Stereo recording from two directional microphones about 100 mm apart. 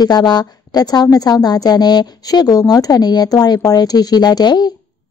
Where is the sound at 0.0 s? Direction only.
45° left (ahead or behind).